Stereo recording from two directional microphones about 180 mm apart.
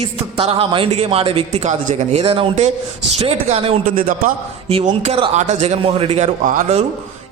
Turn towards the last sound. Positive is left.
turn(degrees=-40)  # may be behind; listen again after turning